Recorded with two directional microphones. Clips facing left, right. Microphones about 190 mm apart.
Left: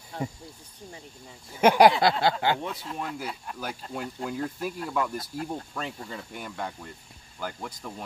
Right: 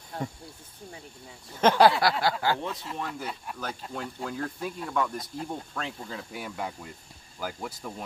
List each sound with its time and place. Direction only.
1.5 s speech: 10° left (ahead or behind)
2.6 s speech: 5° left (ahead or behind)